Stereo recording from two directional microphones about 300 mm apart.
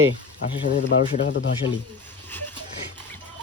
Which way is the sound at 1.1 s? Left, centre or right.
Left.